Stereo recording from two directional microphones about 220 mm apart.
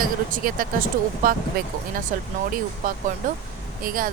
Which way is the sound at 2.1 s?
35° right (ahead or behind).